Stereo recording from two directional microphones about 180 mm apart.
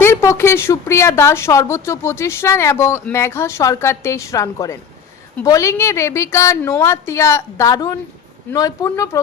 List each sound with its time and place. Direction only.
0.0 s a woman's voice: 15° left (ahead or behind)